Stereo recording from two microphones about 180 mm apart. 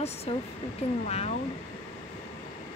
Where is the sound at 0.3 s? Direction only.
35° left (ahead or behind).